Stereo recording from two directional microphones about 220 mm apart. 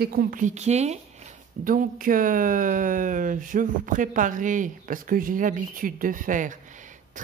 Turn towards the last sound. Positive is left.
turn(degrees=-35)  # may be behind; listen again after turning